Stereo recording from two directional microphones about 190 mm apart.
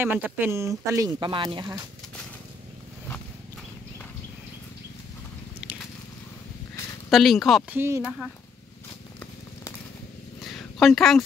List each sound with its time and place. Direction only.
0.0 s speech: 10° right (ahead or behind)
7.1 s speech: centre (ahead or behind)
7.7 s speech: 10° right (ahead or behind)
10.4 s a sound: centre (ahead or behind)